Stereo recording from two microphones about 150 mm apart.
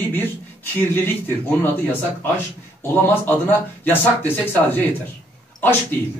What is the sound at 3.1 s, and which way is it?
Speech, 15° left (ahead or behind).